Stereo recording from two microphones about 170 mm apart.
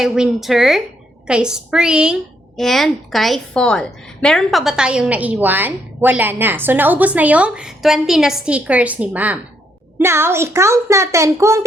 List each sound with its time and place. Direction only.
0.0 s a woman's voice: centre (ahead or behind)